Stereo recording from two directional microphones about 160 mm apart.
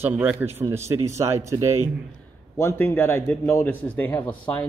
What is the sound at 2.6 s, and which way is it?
A man's voice, 15° left (ahead or behind).